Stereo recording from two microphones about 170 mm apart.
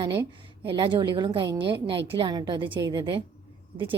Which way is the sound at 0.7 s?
30° right (ahead or behind).